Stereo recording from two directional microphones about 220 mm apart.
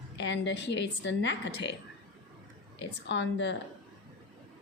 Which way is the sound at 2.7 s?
55° left (ahead or behind).